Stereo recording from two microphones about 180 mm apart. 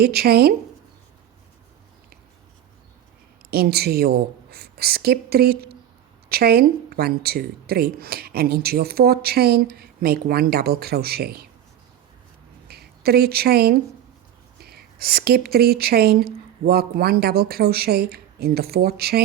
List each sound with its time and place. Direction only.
0.0 s speech: 60° right (ahead or behind)
3.5 s speech: 60° right (ahead or behind)
12.6 s speech: 60° right (ahead or behind)